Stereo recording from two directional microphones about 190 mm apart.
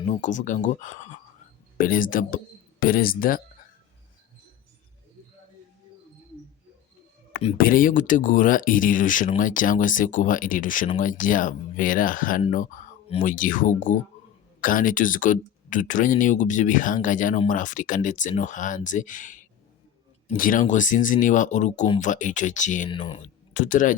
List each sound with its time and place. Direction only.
0.0 s speech: 40° left (ahead or behind)
7.6 s speech: 45° left (ahead or behind)
22.9 s speech: 25° left (ahead or behind)
23.6 s speech: 45° left (ahead or behind)